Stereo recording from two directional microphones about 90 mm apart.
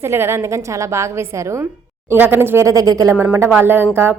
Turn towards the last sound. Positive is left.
turn(degrees=-25)  # may be behind; listen again after turning